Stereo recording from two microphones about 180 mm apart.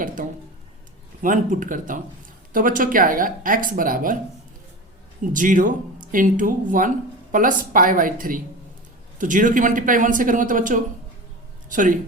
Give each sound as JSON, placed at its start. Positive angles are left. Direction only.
{"t": 0.2, "sound": "a sound", "side_deg": -50}
{"t": 1.2, "sound": "speech", "side_deg": -45}
{"t": 5.3, "sound": "speech", "side_deg": -45}